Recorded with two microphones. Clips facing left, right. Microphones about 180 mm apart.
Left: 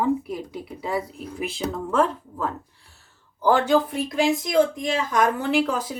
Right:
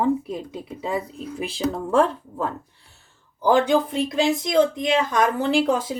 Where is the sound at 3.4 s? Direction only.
15° right (ahead or behind).